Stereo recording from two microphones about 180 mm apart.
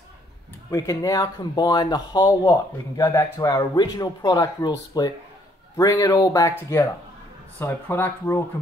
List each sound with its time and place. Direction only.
0.7 s speech: 15° left (ahead or behind)
7.5 s speech: 10° left (ahead or behind)